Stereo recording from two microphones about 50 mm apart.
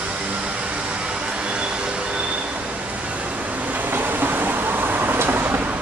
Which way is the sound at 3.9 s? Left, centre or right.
Right.